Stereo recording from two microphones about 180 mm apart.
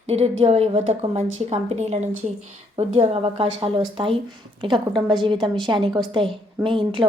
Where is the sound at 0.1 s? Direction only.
35° right (ahead or behind).